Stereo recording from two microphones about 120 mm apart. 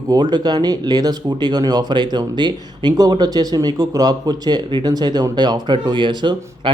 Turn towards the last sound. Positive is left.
turn(degrees=-40)  # may be behind; listen again after turning